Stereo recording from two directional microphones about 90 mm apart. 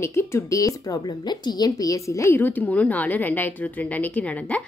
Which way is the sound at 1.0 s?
55° left (ahead or behind).